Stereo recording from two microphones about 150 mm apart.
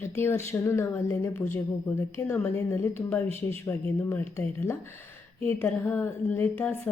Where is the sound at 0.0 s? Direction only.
15° left (ahead or behind).